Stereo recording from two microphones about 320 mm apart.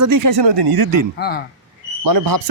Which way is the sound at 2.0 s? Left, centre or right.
Right.